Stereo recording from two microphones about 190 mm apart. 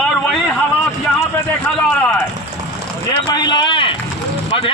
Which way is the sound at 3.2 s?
20° left (ahead or behind).